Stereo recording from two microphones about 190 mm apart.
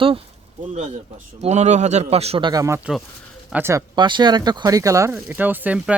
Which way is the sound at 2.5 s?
15° right (ahead or behind).